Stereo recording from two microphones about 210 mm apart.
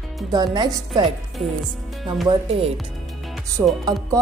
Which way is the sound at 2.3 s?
30° right (ahead or behind).